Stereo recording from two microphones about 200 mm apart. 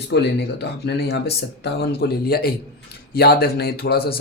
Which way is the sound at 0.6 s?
55° left (ahead or behind).